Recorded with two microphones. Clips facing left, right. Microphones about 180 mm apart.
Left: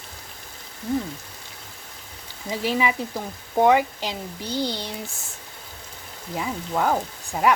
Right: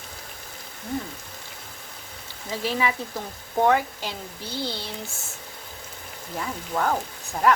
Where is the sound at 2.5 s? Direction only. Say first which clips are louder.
Left 2 dB; 15° left (ahead or behind).